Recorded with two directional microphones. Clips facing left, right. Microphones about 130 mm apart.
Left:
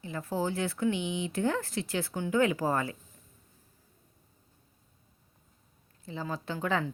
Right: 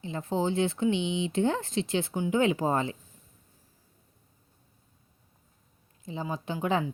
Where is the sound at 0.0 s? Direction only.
20° right (ahead or behind).